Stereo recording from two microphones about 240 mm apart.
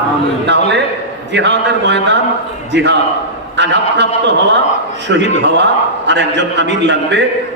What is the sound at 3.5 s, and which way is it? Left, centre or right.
Speech, right.